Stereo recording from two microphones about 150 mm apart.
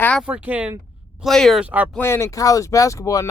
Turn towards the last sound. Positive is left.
turn(degrees=20)  # may be behind; listen again after turning